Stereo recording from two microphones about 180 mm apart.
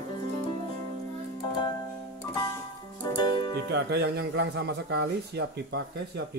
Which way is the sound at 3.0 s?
25° left (ahead or behind).